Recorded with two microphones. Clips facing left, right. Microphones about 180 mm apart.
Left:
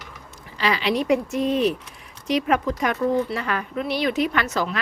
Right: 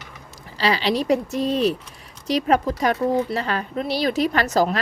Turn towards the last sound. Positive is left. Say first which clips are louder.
# right 4 dB
turn(degrees=-40)  # may be behind; listen again after turning